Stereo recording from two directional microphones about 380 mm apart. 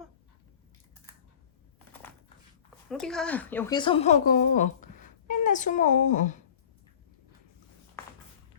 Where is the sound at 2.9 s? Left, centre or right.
Centre.